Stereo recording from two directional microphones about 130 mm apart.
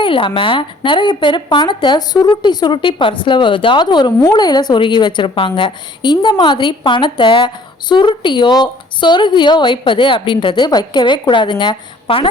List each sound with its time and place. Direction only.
0.0 s a woman's voice: 40° left (ahead or behind)